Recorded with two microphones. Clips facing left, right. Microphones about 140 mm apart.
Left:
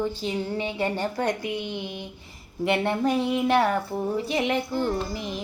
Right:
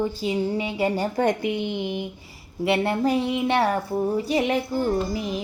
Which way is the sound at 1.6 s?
15° right (ahead or behind).